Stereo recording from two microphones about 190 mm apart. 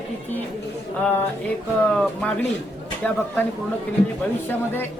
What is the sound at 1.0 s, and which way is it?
A man's voice, 10° left (ahead or behind).